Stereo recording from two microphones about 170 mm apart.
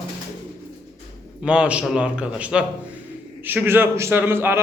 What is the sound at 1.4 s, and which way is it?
A man's voice, 5° right (ahead or behind).